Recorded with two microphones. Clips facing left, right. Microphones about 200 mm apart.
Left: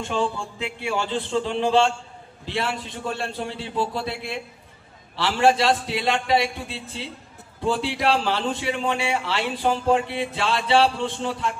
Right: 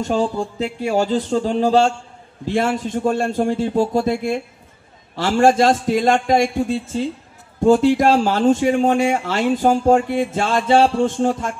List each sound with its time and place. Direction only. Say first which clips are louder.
0.0 s a man's voice: right 6 dB; 40° right (ahead or behind)